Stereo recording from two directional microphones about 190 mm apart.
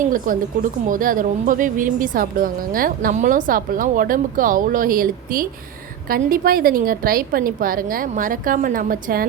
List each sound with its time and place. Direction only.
0.0 s speech: 45° right (ahead or behind)